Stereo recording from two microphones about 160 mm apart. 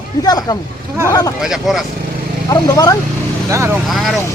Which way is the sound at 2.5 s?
20° left (ahead or behind).